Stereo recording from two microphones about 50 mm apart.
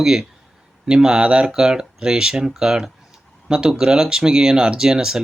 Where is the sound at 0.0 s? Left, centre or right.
Centre.